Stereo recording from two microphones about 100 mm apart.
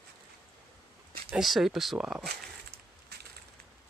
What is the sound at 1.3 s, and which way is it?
Speech, centre (ahead or behind).